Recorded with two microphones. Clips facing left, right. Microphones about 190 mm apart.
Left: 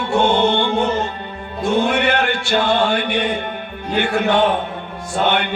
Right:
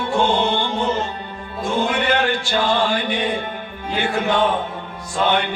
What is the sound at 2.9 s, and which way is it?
Music, 65° left (ahead or behind).